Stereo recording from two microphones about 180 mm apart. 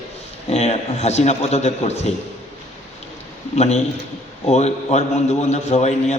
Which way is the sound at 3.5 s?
40° left (ahead or behind).